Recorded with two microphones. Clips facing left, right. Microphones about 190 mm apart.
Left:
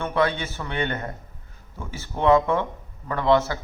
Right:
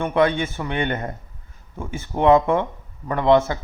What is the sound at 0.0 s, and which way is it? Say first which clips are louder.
A man's voice: right 4 dB; 20° right (ahead or behind).